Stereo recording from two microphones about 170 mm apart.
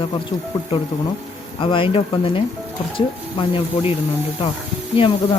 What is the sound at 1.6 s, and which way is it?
Speech, 30° left (ahead or behind).